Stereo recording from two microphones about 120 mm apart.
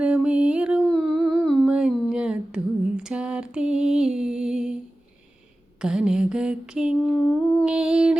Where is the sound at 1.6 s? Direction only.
5° right (ahead or behind).